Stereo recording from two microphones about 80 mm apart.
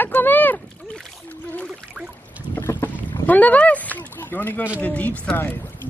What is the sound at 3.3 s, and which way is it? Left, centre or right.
Speech, centre.